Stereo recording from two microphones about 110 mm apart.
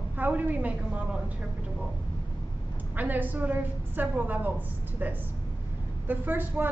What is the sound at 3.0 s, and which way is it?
A woman's voice, 15° right (ahead or behind).